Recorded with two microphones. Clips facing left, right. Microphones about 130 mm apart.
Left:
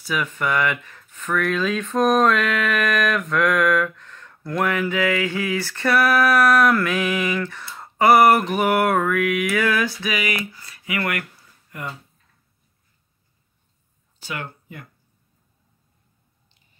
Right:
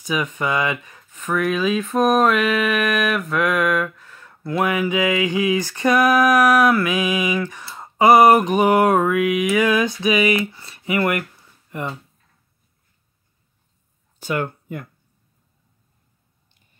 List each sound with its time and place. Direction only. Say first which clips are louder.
0.0 s speech: right 2 dB; 20° right (ahead or behind)
14.2 s speech: right 8 dB; 50° right (ahead or behind)